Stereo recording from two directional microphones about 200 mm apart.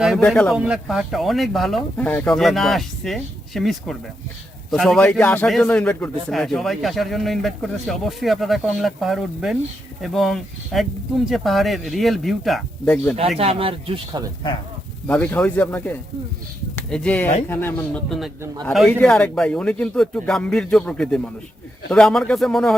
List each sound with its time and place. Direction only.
0.0 s a man's voice: centre (ahead or behind)
13.4 s speech: 30° right (ahead or behind)
15.0 s a man's voice: 10° left (ahead or behind)